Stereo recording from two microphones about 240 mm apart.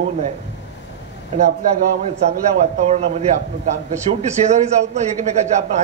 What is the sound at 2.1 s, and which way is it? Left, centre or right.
A man's voice, right.